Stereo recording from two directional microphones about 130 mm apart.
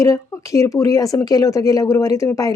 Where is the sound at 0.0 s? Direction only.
25° left (ahead or behind).